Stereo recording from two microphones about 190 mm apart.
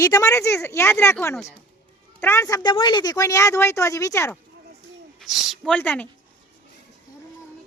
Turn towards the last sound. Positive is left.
turn(degrees=10)  # may be behind; listen again after turning